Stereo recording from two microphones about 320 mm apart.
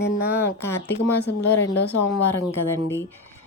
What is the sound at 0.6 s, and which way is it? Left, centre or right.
Speech, centre.